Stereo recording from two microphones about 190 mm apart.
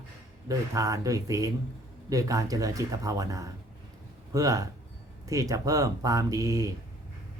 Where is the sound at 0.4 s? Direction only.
15° right (ahead or behind).